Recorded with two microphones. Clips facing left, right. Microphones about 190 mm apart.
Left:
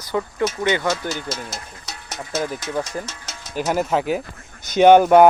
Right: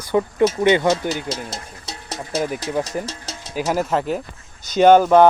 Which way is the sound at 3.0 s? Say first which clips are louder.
Right 4 dB; 35° right (ahead or behind).